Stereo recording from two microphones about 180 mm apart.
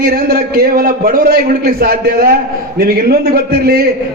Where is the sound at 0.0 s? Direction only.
55° right (ahead or behind).